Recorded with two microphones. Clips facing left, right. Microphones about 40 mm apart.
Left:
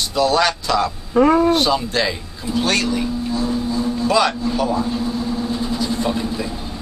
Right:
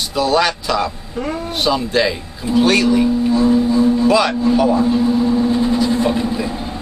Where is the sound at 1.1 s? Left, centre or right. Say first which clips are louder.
Left 13 dB; left.